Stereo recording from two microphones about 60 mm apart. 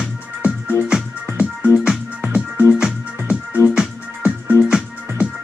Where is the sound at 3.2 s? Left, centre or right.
Left.